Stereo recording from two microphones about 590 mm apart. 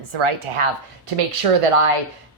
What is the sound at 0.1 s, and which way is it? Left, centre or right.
A woman's voice, right.